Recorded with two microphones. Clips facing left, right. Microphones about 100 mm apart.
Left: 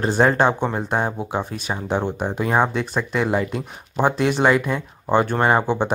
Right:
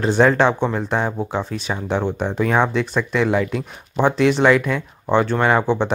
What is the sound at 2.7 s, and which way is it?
Speech, 45° left (ahead or behind).